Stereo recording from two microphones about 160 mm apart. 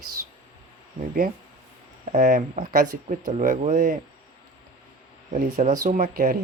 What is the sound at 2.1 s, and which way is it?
Speech, 50° right (ahead or behind).